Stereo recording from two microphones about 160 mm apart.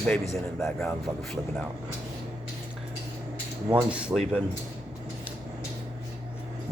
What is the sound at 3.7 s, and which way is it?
Cutlery, 5° right (ahead or behind).